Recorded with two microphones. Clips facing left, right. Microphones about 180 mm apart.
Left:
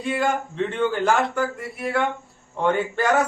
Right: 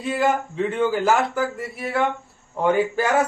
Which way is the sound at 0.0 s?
5° right (ahead or behind).